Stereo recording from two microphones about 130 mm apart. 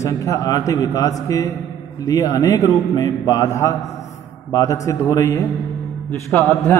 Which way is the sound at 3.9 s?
60° left (ahead or behind).